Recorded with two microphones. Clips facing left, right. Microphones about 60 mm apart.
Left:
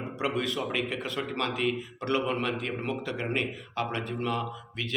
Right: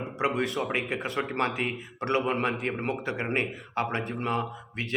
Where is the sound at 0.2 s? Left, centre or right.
Right.